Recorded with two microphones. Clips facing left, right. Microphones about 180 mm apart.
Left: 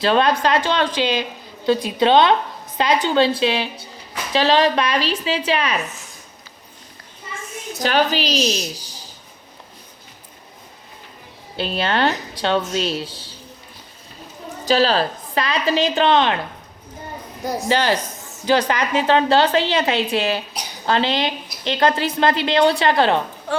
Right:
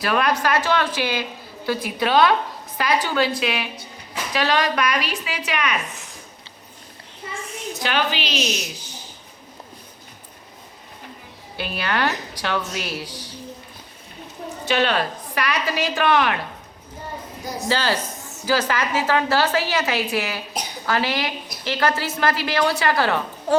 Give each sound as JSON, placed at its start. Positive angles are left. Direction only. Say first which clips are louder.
{"t": 0.0, "sound": "a woman's voice", "louder": "left 4 dB", "side_deg": 25}
{"t": 7.8, "sound": "a woman's voice", "louder": "left 5 dB", "side_deg": 40}
{"t": 11.5, "sound": "a woman's voice", "louder": "left 4 dB", "side_deg": 25}
{"t": 14.6, "sound": "a woman's voice", "louder": "left 4 dB", "side_deg": 35}
{"t": 17.7, "sound": "a woman's voice", "louder": "left 3 dB", "side_deg": 15}